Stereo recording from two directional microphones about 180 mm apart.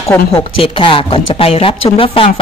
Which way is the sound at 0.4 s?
30° left (ahead or behind).